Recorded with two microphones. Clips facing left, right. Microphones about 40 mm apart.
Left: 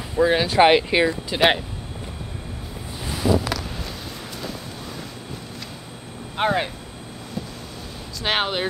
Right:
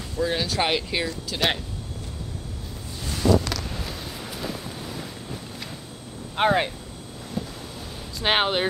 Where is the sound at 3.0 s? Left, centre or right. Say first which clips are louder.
Even; centre.